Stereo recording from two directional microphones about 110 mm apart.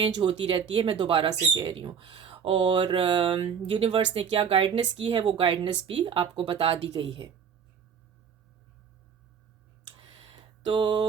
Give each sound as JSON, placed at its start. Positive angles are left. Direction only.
{"t": 0.0, "sound": "speech", "side_deg": -50}
{"t": 1.3, "sound": "speech", "side_deg": -40}
{"t": 10.0, "sound": "a sound", "side_deg": -55}